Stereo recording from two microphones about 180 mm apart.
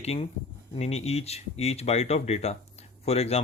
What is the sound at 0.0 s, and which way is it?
Speech, 35° left (ahead or behind).